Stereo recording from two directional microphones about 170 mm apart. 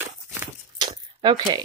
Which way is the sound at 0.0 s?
15° right (ahead or behind).